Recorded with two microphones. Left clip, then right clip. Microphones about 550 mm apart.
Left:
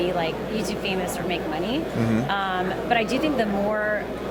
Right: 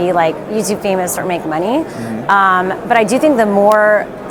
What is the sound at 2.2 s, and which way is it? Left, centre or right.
A woman's voice, right.